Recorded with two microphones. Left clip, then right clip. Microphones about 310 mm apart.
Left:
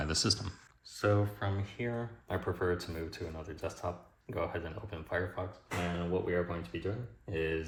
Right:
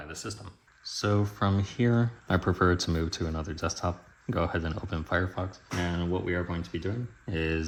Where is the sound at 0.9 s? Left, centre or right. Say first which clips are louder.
Right 2 dB; centre; by 5.4 s right.